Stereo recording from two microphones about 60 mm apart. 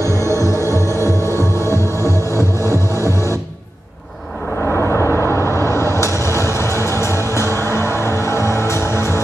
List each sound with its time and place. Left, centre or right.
0.0 s music: left
4.7 s music: left